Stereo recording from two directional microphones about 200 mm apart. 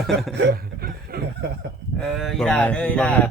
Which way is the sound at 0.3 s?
50° right (ahead or behind).